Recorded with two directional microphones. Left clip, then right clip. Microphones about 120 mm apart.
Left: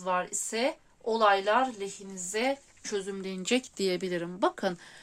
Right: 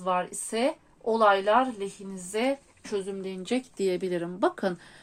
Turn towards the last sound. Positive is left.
turn(degrees=20)  # may be behind; listen again after turning